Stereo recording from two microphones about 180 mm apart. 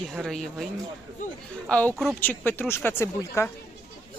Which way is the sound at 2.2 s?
10° left (ahead or behind).